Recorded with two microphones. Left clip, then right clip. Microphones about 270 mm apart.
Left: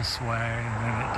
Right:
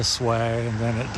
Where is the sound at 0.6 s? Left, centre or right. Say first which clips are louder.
Right 3 dB; centre.